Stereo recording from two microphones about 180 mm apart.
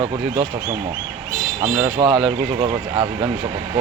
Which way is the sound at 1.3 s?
5° right (ahead or behind).